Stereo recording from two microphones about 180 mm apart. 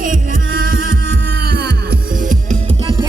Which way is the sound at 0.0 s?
50° right (ahead or behind).